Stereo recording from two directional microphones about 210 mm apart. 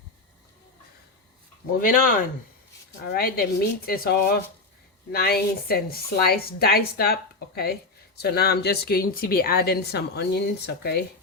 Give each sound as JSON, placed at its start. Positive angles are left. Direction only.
{"t": 1.8, "sound": "speech", "side_deg": 40}